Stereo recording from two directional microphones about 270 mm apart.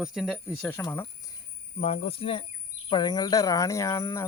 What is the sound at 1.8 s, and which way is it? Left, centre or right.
Speech, left.